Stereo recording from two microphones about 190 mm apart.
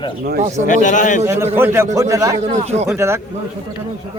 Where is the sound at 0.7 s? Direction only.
40° left (ahead or behind).